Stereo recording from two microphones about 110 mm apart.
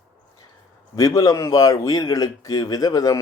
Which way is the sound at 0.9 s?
30° left (ahead or behind).